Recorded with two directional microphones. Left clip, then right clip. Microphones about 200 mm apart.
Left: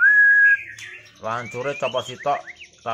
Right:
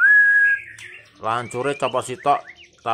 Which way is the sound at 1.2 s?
40° right (ahead or behind).